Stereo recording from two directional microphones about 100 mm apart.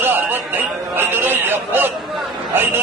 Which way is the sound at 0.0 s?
20° right (ahead or behind).